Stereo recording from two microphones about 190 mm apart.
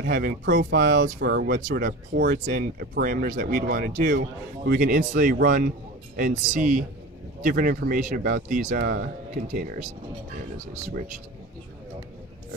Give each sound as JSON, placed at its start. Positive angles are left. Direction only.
{"t": 0.0, "sound": "speech", "side_deg": -50}